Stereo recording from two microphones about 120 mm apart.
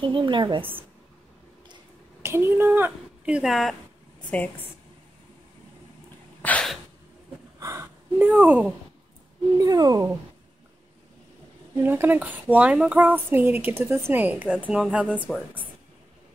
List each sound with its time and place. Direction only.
0.0 s a woman's voice: 40° right (ahead or behind)
2.2 s speech: 20° right (ahead or behind); by 3.7 s centre (ahead or behind)
6.4 s sneeze: 10° left (ahead or behind)
7.5 s a sound: 25° right (ahead or behind)
8.3 s speech: 15° right (ahead or behind)
9.6 s a woman's voice: 35° right (ahead or behind)
11.7 s speech: 20° right (ahead or behind)